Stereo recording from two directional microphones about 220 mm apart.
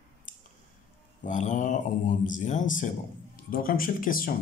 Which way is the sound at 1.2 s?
35° left (ahead or behind).